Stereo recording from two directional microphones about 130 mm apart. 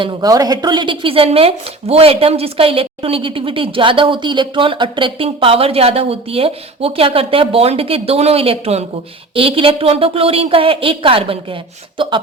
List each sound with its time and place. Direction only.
0.0 s speech: 35° right (ahead or behind)